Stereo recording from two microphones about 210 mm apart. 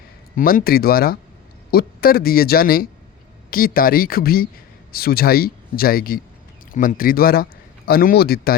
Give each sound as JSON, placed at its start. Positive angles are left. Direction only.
{"t": 0.3, "sound": "speech", "side_deg": 40}